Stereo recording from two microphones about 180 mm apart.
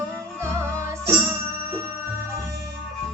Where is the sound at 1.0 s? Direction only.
10° right (ahead or behind).